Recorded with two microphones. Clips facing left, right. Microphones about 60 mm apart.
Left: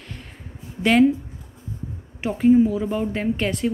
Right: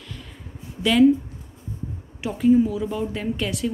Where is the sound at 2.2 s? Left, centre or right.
Left.